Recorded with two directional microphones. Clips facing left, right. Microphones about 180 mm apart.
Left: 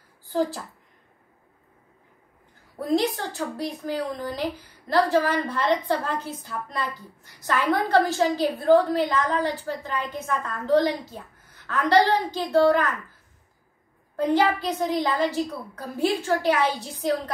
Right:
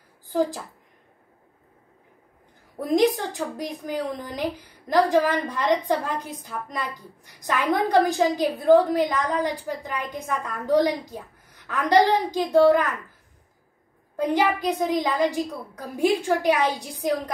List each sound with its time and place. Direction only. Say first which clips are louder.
2.8 s a woman's voice: right 3 dB; 15° right (ahead or behind)
14.1 s a woman's voice: left 1 dB; 15° right (ahead or behind)